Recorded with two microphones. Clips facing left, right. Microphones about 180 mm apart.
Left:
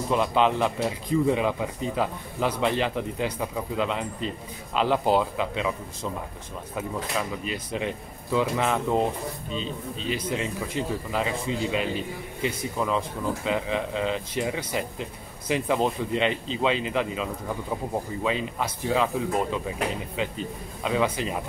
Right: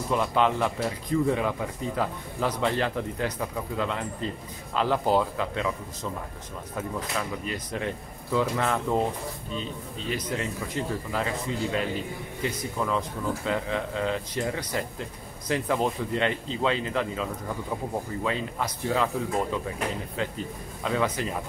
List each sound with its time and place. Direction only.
0.1 s a man's voice: 20° left (ahead or behind)
6.7 s a man's voice: 15° left (ahead or behind)